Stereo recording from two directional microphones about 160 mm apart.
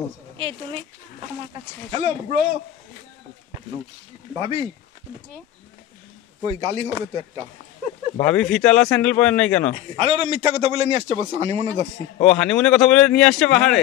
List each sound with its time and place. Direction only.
0.4 s a man's voice: 35° right (ahead or behind)
1.9 s a man's voice: 40° right (ahead or behind)
4.4 s a man's voice: 30° right (ahead or behind)
6.4 s speech: 40° right (ahead or behind)
8.2 s speech: 5° left (ahead or behind)
9.8 s a man's voice: 40° right (ahead or behind)
12.2 s speech: 5° left (ahead or behind)